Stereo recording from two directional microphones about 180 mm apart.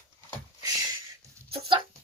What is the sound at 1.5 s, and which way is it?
Chicken, 25° right (ahead or behind).